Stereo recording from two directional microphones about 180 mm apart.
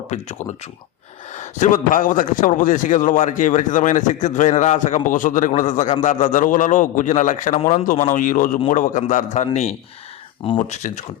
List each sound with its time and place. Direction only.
0.1 s a man's voice: 40° left (ahead or behind)